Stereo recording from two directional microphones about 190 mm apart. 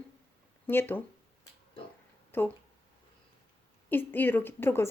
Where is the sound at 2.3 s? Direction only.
10° left (ahead or behind).